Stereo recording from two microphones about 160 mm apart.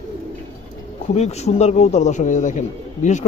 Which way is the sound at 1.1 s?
40° left (ahead or behind).